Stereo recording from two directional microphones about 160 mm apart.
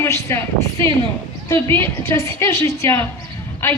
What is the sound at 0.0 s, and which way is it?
Speech, 20° left (ahead or behind).